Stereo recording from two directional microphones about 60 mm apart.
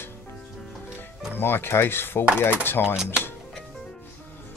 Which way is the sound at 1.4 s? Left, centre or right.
Left.